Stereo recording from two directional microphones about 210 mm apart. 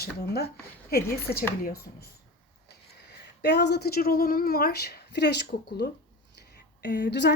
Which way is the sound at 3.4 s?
55° left (ahead or behind).